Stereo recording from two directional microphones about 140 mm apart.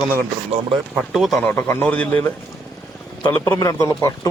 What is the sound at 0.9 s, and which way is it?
Speech, centre (ahead or behind).